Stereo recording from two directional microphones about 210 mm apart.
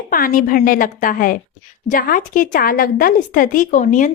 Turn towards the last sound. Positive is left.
turn(degrees=35)  # may be behind; listen again after turning